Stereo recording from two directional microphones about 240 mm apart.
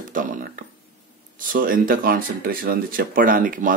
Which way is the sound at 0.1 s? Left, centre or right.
Right.